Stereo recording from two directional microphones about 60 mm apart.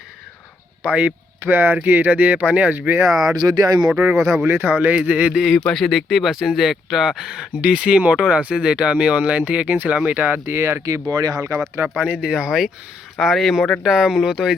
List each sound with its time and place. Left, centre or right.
0.8 s speech: right
3.1 s speech: centre
3.4 s speech: right
4.1 s speech: centre
4.4 s speech: right
5.3 s speech: centre; by 10.4 s right
10.4 s speech: right
11.1 s speech: right
11.8 s speech: right; by 14.5 s centre